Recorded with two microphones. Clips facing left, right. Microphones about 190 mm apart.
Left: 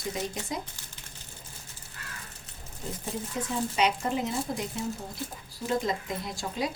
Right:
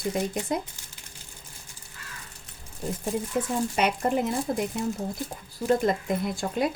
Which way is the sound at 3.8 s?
55° right (ahead or behind).